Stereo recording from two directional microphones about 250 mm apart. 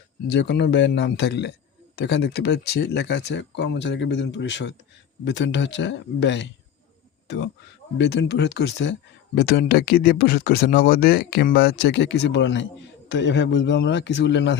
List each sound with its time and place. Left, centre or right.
0.3 s speech: left